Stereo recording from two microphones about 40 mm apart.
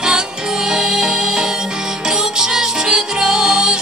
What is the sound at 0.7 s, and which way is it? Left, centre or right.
Music, centre.